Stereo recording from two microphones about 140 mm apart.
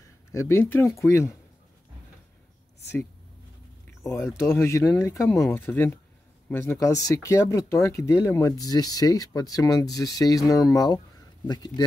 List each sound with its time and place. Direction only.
0.3 s speech: 20° left (ahead or behind)
4.0 s speech: 20° left (ahead or behind)